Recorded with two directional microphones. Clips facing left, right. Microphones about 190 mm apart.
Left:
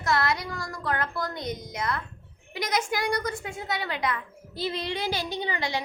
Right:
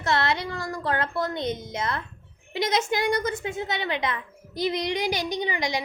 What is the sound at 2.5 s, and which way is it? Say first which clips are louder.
A woman's voice: right 4 dB; 25° right (ahead or behind).